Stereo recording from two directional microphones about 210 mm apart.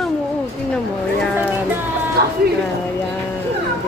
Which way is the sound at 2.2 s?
50° right (ahead or behind).